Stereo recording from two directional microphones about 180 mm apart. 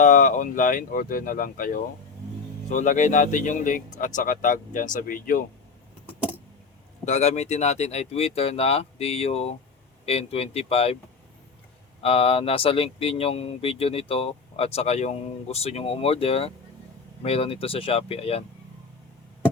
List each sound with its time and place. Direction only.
0.0 s speech: 45° left (ahead or behind)
7.0 s speech: 40° left (ahead or behind)
12.0 s speech: 30° left (ahead or behind)